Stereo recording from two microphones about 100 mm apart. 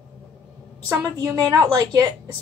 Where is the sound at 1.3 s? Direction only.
35° right (ahead or behind).